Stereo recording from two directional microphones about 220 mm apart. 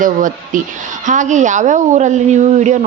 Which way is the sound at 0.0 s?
35° right (ahead or behind).